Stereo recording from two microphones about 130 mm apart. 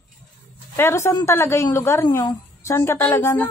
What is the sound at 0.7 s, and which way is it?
A woman's voice, 20° left (ahead or behind).